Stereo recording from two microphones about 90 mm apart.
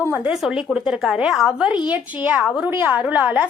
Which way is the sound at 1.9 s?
20° right (ahead or behind).